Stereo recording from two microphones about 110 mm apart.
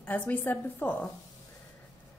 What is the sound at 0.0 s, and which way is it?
A woman's voice, 15° left (ahead or behind).